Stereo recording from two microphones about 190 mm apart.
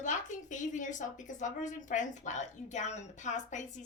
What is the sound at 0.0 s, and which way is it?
A woman's voice, 40° left (ahead or behind).